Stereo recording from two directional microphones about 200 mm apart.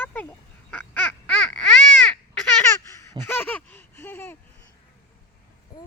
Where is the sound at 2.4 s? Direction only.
10° left (ahead or behind).